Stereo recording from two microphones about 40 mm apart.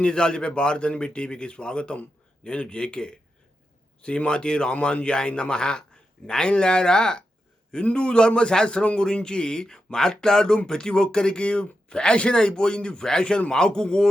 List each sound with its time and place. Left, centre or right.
0.0 s speech: left
4.3 s speech: left